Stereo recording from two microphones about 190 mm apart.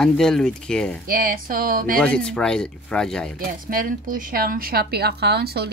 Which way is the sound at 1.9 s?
5° left (ahead or behind).